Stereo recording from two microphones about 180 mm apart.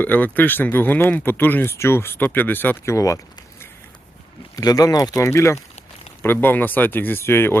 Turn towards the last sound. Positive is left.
turn(degrees=15)  # may be behind; listen again after turning